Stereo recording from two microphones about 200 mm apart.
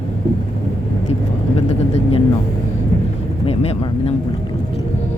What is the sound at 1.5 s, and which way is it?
Speech, 30° left (ahead or behind).